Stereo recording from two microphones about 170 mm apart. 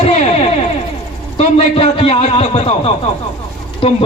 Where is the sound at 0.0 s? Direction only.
40° left (ahead or behind).